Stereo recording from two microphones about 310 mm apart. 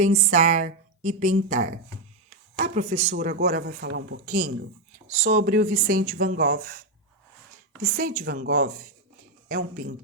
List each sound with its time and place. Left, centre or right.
0.0 s speech: right
7.8 s speech: right